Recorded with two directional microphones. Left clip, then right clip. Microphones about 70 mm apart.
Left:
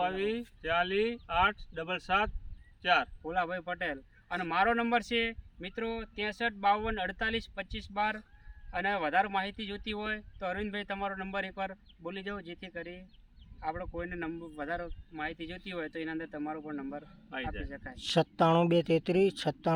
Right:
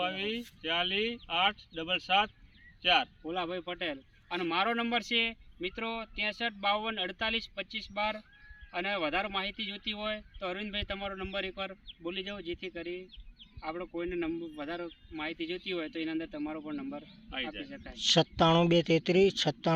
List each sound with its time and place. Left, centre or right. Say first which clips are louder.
0.0 s speech: left 2 dB; left
3.2 s speech: left 2 dB; left
11.1 s speech: even; left
14.5 s speech: left 2 dB; left
16.3 s speech: even; centre
17.2 s speech: right 1 dB; left
17.8 s speech: right 3 dB; centre